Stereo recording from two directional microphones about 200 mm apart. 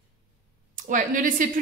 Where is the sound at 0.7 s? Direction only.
40° right (ahead or behind).